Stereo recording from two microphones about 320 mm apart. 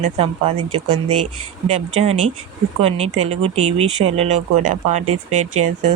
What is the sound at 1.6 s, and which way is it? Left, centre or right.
Speech, centre.